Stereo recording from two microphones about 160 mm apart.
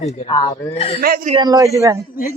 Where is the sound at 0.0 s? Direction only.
40° left (ahead or behind).